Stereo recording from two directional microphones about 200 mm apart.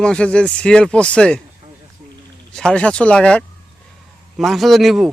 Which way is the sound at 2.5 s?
5° left (ahead or behind).